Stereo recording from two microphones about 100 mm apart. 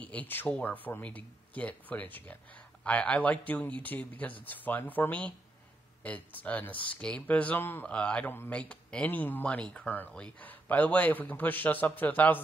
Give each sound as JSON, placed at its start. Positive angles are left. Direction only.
{"t": 0.0, "sound": "speech", "side_deg": 15}